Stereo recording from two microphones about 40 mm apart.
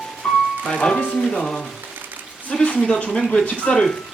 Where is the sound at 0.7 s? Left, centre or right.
Left.